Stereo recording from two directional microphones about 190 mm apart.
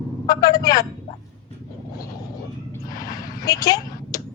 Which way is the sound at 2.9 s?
20° left (ahead or behind).